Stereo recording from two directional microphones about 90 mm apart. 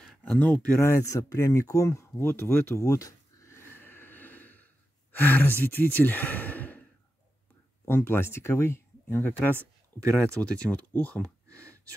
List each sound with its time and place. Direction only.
0.2 s speech: 15° left (ahead or behind)
0.7 s a sound: 30° left (ahead or behind)
5.1 s speech: 20° left (ahead or behind)
5.9 s sigh: 20° left (ahead or behind)
7.8 s speech: 30° left (ahead or behind)
10.4 s speech: 15° left (ahead or behind)